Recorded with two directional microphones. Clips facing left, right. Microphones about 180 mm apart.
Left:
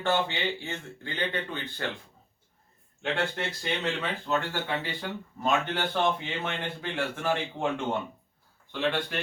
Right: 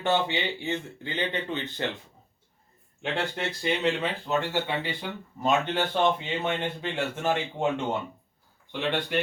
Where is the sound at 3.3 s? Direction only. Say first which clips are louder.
Right 3 dB; 15° right (ahead or behind).